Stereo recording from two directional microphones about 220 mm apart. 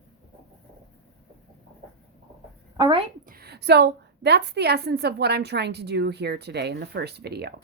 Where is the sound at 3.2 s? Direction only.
45° right (ahead or behind).